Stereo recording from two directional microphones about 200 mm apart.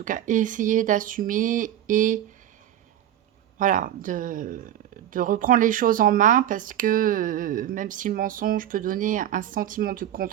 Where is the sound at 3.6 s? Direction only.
40° right (ahead or behind).